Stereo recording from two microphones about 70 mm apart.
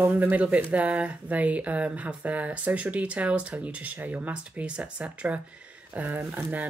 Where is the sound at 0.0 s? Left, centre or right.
Right.